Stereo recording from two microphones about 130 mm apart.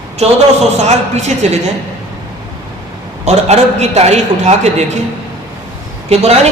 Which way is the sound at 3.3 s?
55° right (ahead or behind).